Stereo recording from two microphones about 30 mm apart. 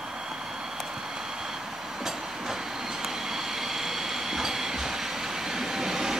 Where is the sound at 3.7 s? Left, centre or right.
Centre.